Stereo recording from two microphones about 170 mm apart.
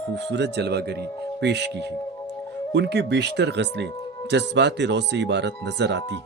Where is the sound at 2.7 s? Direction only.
85° right.